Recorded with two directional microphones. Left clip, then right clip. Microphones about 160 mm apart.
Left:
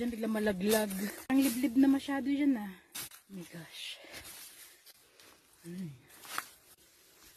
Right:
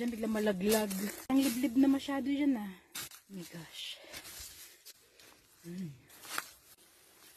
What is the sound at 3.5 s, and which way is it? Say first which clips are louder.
Speech: even; 20° left (ahead or behind).